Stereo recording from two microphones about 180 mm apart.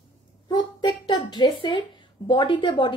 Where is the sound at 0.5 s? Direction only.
25° left (ahead or behind).